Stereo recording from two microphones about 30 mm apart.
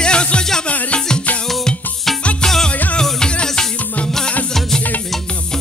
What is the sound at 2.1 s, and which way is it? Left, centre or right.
Music, centre.